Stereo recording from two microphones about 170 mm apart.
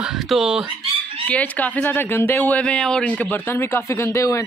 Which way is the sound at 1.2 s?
10° left (ahead or behind).